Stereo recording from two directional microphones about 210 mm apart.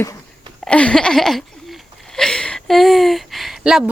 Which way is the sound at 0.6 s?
5° left (ahead or behind).